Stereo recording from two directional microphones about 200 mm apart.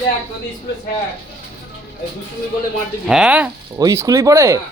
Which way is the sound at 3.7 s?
15° right (ahead or behind).